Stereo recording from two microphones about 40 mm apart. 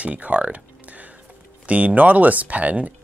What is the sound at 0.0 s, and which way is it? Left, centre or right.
Speech, right.